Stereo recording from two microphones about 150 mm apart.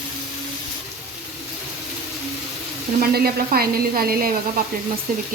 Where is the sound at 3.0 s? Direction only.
80° right.